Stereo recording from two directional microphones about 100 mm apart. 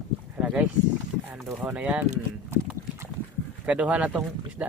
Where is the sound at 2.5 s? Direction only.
25° right (ahead or behind).